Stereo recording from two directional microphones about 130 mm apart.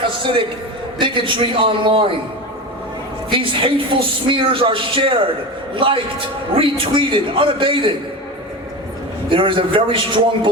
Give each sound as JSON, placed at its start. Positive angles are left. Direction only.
{"t": 0.9, "sound": "a man's voice", "side_deg": -40}
{"t": 3.2, "sound": "a man's voice", "side_deg": -40}
{"t": 9.3, "sound": "a man's voice", "side_deg": -40}